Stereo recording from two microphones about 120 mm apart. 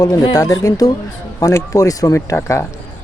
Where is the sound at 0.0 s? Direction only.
30° left (ahead or behind).